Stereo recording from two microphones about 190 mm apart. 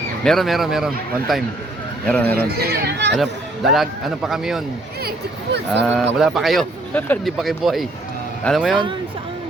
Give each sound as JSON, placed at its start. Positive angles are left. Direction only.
{"t": 0.3, "sound": "a man's voice", "side_deg": 0}
{"t": 2.3, "sound": "speech", "side_deg": -55}
{"t": 3.2, "sound": "a man's voice", "side_deg": 0}
{"t": 5.0, "sound": "speech", "side_deg": -60}
{"t": 5.8, "sound": "a man's voice", "side_deg": 0}